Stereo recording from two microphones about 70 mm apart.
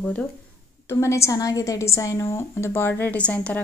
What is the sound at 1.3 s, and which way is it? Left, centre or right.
A woman's voice, left.